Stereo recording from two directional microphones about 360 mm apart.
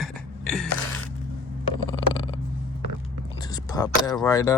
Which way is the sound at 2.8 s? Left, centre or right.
Right.